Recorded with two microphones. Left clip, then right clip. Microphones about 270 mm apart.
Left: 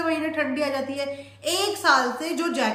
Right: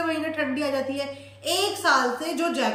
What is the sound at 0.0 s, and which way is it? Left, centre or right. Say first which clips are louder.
A woman's voice: left 1 dB; centre.